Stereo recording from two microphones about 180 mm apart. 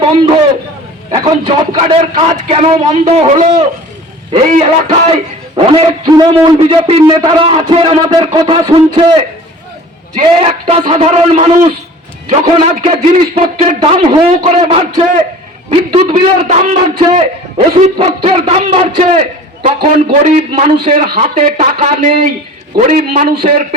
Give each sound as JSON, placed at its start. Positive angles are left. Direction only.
{"t": 1.1, "sound": "a man's voice", "side_deg": -30}
{"t": 4.4, "sound": "a man's voice", "side_deg": -40}
{"t": 10.2, "sound": "a man's voice", "side_deg": -30}